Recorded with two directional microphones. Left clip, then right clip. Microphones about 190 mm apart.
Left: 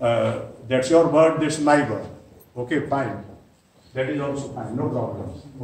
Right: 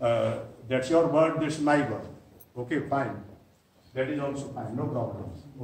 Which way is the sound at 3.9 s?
10° right (ahead or behind).